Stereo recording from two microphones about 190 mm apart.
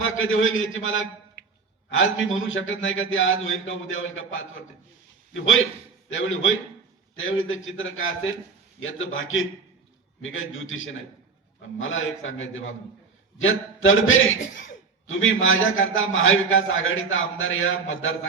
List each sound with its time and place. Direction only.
0.0 s a man's voice: 90° left